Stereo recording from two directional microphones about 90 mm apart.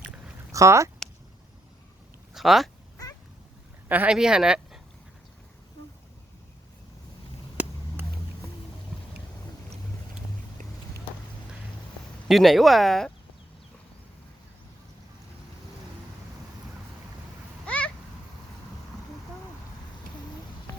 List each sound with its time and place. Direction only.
0.5 s speech: 35° right (ahead or behind)
2.3 s speech: centre (ahead or behind)
3.8 s speech: 20° right (ahead or behind)
4.1 s speech: 5° right (ahead or behind)
7.5 s vehicle: 20° right (ahead or behind)
12.3 s speech: centre (ahead or behind)
17.7 s a sound: 10° left (ahead or behind)